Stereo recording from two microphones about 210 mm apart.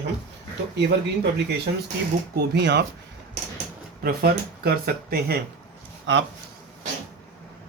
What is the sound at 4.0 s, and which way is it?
Speech, 45° right (ahead or behind).